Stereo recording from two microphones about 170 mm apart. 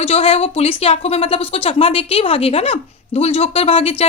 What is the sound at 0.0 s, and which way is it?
A woman's voice, 35° left (ahead or behind).